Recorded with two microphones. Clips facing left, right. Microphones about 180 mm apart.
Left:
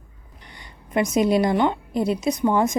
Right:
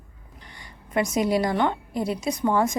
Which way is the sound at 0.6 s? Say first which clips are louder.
Left 2 dB; 20° left (ahead or behind).